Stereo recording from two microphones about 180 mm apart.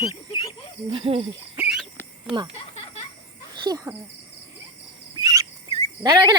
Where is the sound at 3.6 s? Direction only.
20° right (ahead or behind).